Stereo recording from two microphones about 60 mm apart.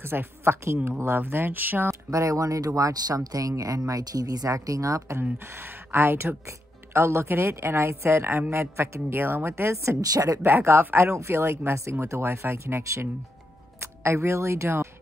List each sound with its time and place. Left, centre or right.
0.0 s speech: right
1.9 s speech: right
5.2 s speech: right
10.1 s speech: right
10.4 s speech: right